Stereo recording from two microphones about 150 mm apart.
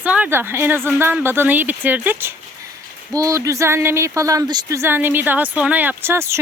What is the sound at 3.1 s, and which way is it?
Speech, 25° right (ahead or behind).